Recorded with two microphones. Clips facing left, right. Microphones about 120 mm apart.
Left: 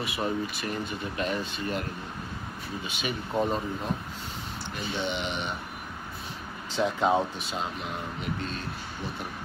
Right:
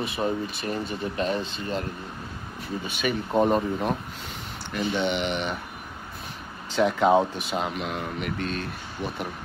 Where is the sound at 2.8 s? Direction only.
50° right (ahead or behind).